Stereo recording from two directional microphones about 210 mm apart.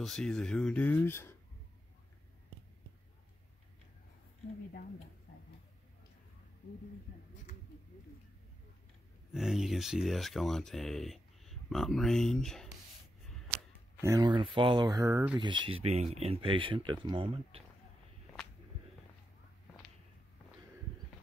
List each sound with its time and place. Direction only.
0.0 s speech: centre (ahead or behind)
9.3 s speech: centre (ahead or behind)
14.0 s speech: 20° right (ahead or behind)